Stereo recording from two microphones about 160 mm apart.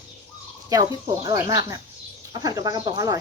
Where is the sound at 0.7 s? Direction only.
20° right (ahead or behind).